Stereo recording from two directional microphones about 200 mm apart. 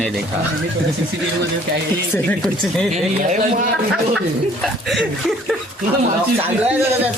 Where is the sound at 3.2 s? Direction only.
40° right (ahead or behind).